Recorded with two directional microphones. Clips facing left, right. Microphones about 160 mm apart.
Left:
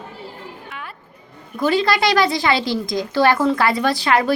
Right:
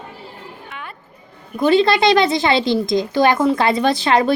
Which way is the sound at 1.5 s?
25° right (ahead or behind).